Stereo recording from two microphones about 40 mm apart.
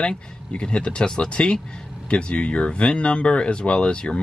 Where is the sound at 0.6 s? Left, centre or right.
Left.